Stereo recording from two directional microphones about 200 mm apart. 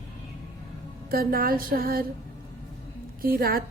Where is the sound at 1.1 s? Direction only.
45° right (ahead or behind).